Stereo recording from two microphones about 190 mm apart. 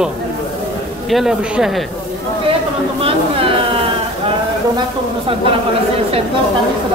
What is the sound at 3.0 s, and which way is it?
Speech, 30° right (ahead or behind).